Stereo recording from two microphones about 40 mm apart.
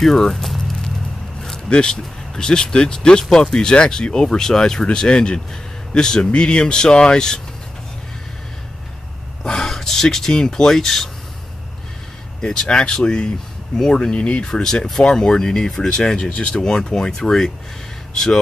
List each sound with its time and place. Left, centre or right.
0.0 s a sound: centre
1.4 s speech: centre
4.8 s speech: left
9.4 s speech: centre
12.4 s speech: left
14.5 s speech: centre
16.5 s speech: centre